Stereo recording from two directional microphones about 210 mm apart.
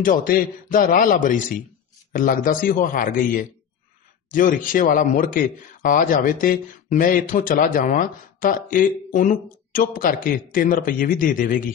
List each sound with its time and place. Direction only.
0.0 s a man's voice: 40° left (ahead or behind)